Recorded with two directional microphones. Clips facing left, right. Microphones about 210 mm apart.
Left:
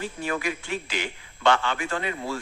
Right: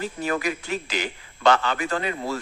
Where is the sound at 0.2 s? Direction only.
40° right (ahead or behind).